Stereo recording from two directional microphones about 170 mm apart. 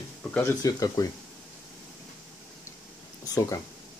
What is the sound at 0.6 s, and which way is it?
Speech, 20° left (ahead or behind).